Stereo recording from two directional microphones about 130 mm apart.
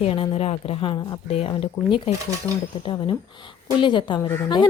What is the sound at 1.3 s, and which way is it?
A woman's voice, 50° left (ahead or behind).